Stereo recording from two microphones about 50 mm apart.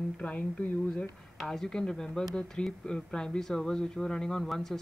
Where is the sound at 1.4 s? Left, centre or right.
Centre.